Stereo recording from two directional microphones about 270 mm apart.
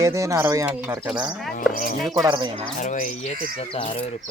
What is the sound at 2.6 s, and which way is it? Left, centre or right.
Speech, left.